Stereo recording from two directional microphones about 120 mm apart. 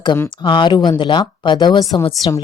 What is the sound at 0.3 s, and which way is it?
A woman's voice, 40° left (ahead or behind).